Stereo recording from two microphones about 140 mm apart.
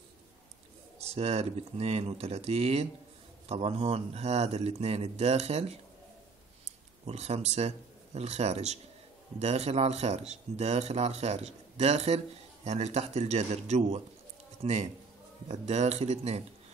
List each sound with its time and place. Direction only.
1.1 s speech: 50° right (ahead or behind)
7.1 s a man's voice: 50° right (ahead or behind)